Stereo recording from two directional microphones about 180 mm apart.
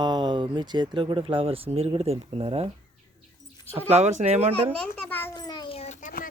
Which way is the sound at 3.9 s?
40° right (ahead or behind).